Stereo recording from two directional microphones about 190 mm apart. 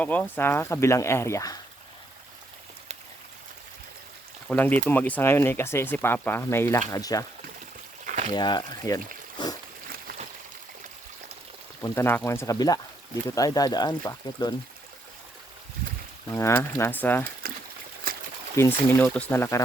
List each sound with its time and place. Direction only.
0.0 s speech: 10° left (ahead or behind)
4.4 s speech: 10° left (ahead or behind)
8.4 s speech: 25° left (ahead or behind)
9.4 s dog: 25° left (ahead or behind)
11.8 s speech: 10° left (ahead or behind)
16.3 s speech: 15° left (ahead or behind)
18.1 s trickle: 50° right (ahead or behind)
18.5 s speech: 10° left (ahead or behind)